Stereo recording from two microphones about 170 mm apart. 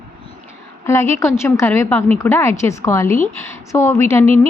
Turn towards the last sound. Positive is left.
turn(degrees=15)  # may be behind; listen again after turning